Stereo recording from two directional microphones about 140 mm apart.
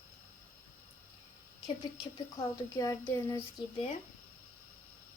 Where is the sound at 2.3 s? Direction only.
25° left (ahead or behind).